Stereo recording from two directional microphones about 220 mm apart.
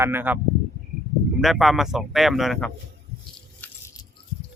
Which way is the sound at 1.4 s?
Centre (ahead or behind).